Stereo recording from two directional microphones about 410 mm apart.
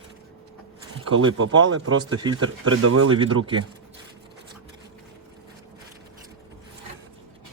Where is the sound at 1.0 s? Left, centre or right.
Right.